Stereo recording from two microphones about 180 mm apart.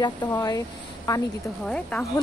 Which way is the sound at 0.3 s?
20° left (ahead or behind).